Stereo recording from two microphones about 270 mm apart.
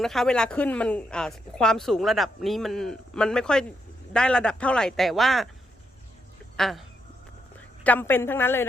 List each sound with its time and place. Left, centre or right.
0.0 s speech: centre
6.6 s speech: centre
7.9 s speech: centre